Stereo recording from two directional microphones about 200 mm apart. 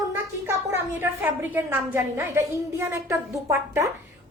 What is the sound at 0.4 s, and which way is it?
A woman's voice, 10° right (ahead or behind).